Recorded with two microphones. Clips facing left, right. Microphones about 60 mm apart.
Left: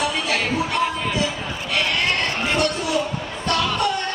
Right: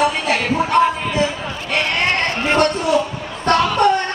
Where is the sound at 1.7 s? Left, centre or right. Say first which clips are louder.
Right 3 dB; right.